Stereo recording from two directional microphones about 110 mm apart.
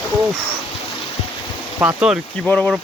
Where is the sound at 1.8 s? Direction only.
15° right (ahead or behind).